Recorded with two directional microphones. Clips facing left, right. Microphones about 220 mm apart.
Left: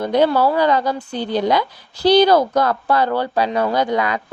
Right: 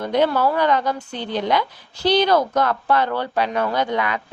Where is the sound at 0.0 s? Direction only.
35° left (ahead or behind).